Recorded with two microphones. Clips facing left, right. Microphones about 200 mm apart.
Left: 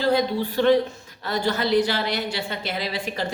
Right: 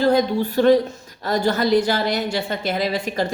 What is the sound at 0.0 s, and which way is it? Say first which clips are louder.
A woman's voice: right 4 dB; 45° right (ahead or behind).